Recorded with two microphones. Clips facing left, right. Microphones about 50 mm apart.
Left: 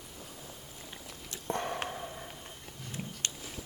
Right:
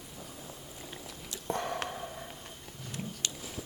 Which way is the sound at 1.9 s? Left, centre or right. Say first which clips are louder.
Even; centre.